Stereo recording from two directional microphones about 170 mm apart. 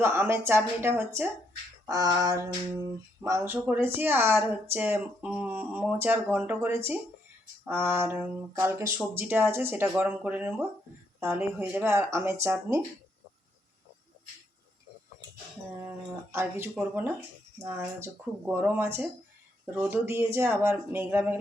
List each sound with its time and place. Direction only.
0.0 s speech: 15° right (ahead or behind)
1.9 s a sound: 20° right (ahead or behind)
3.2 s speech: 15° right (ahead or behind)
16.3 s speech: 15° right (ahead or behind)